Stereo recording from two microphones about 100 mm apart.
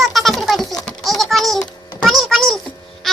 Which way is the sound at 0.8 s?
Centre (ahead or behind).